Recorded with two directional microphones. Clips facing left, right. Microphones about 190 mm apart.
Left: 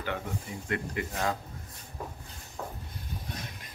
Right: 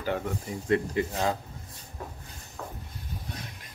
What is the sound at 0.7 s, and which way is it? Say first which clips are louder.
Speech: right 8 dB; 30° right (ahead or behind).